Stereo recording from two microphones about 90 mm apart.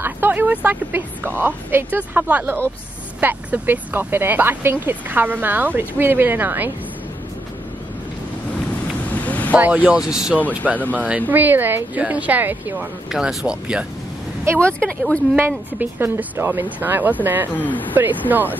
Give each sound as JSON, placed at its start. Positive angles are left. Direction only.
{"t": 0.0, "sound": "speech", "side_deg": -20}
{"t": 9.1, "sound": "vehicle", "side_deg": 20}
{"t": 9.6, "sound": "speech", "side_deg": -15}
{"t": 10.8, "sound": "speech", "side_deg": 15}
{"t": 11.1, "sound": "speech", "side_deg": -20}
{"t": 13.1, "sound": "speech", "side_deg": -5}
{"t": 14.6, "sound": "speech", "side_deg": 15}
{"t": 15.3, "sound": "speech", "side_deg": -25}
{"t": 17.6, "sound": "speech", "side_deg": 20}